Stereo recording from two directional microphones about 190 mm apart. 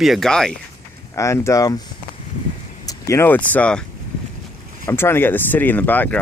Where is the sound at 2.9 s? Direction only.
15° left (ahead or behind).